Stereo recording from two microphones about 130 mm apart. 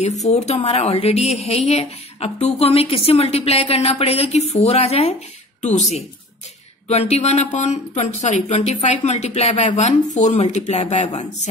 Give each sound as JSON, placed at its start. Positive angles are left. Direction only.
{"t": 0.2, "sound": "speech", "side_deg": 55}